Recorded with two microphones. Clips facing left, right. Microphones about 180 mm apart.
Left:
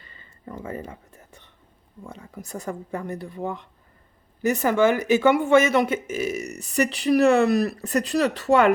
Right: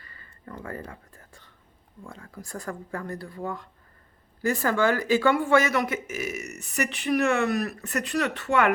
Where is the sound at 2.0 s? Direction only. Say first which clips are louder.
Left 3 dB; 20° left (ahead or behind).